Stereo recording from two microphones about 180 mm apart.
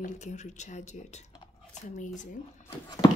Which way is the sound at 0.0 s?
40° left (ahead or behind).